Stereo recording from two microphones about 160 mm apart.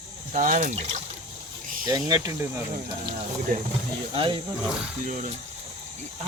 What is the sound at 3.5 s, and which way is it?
Speech, 60° right (ahead or behind).